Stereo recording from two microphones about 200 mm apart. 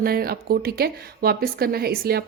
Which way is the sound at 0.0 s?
50° right (ahead or behind).